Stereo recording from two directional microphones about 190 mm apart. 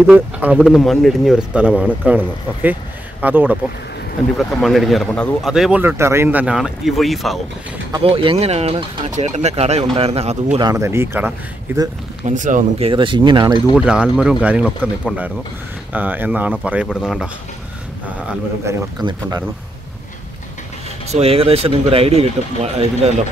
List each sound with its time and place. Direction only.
0.0 s speech: 10° right (ahead or behind)
7.9 s speech: 30° right (ahead or behind)
10.6 s speech: 15° right (ahead or behind)
12.3 s speech: 40° right (ahead or behind); by 13.6 s 25° right (ahead or behind)
13.7 s speech: 5° right (ahead or behind)
18.7 s speech: 20° right (ahead or behind)
21.1 s speech: 30° right (ahead or behind)